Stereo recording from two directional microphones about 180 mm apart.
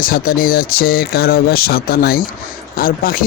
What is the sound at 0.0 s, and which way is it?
Speech, 55° left (ahead or behind).